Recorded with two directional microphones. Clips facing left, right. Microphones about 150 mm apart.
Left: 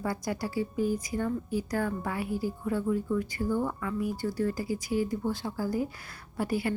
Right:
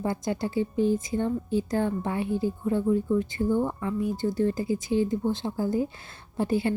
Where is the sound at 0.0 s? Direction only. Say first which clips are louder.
Right 4 dB; 25° right (ahead or behind).